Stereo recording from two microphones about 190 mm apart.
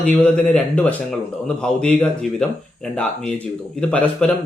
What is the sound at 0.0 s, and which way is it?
A man's voice, 5° left (ahead or behind).